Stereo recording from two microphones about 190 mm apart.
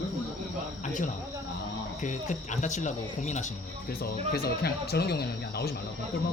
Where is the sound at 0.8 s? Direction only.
40° left (ahead or behind).